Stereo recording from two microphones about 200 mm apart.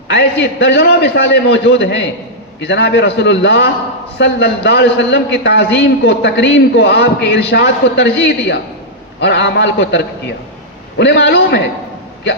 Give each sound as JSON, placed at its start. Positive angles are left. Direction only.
{"t": 0.1, "sound": "a man's voice", "side_deg": 60}